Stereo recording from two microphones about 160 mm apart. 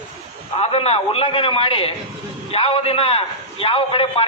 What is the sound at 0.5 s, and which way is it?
A man's voice, 40° left (ahead or behind).